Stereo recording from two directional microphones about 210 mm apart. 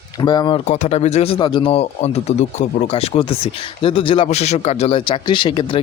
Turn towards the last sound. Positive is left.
turn(degrees=25)  # may be behind; listen again after turning